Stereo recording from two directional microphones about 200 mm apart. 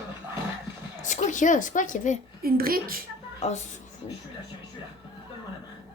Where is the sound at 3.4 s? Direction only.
35° left (ahead or behind).